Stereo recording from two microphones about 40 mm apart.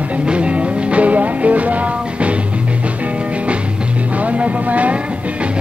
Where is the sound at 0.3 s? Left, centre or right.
Right.